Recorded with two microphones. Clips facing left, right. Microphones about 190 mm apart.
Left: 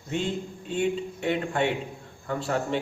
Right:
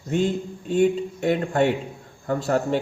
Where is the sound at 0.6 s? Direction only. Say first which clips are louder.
Right 7 dB; 40° right (ahead or behind).